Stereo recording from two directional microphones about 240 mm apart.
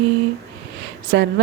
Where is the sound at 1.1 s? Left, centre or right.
Right.